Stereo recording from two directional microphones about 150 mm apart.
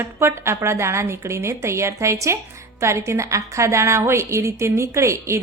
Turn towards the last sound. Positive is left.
turn(degrees=-20)  # may be behind; listen again after turning